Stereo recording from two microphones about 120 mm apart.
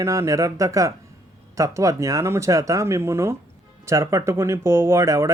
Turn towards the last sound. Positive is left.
turn(degrees=-25)  # may be behind; listen again after turning